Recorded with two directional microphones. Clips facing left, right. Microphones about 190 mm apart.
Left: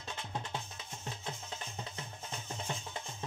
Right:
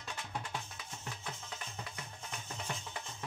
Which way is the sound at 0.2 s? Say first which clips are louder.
Left 1 dB; 25° left (ahead or behind).